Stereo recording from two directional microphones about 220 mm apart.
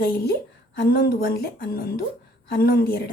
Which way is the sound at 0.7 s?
45° left (ahead or behind).